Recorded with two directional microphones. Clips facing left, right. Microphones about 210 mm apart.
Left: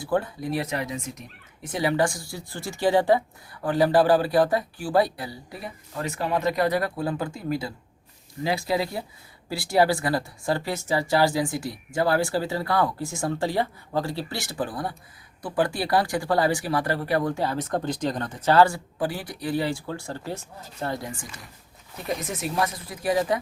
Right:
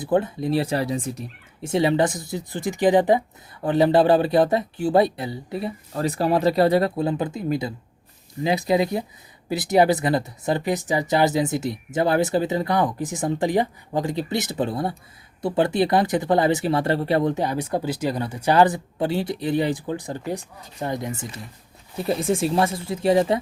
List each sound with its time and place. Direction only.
0.0 s speech: 20° right (ahead or behind)